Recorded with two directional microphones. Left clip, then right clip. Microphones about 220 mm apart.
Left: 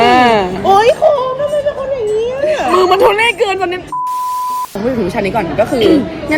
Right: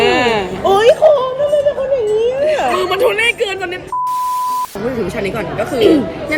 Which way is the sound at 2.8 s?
50° left (ahead or behind).